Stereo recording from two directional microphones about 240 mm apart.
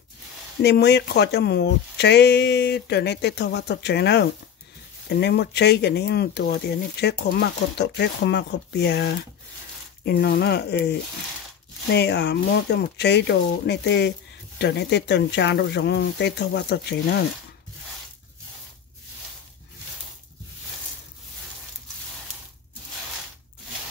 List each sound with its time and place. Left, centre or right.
0.6 s speech: left